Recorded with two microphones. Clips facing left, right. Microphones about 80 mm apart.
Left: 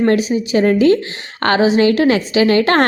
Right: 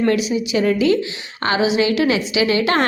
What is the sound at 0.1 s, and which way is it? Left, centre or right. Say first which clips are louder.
Speech: left 3 dB; left.